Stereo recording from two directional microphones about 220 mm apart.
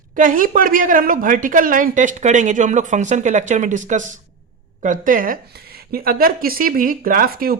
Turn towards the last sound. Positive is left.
turn(degrees=-45)  # may be behind; listen again after turning